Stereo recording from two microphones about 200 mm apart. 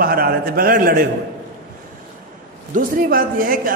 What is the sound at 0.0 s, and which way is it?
A man's voice, 45° right (ahead or behind).